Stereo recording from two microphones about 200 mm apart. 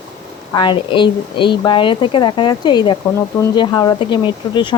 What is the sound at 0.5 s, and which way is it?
Speech, 25° left (ahead or behind).